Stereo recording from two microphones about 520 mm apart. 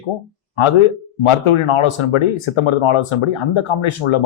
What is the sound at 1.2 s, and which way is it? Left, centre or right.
Speech, left.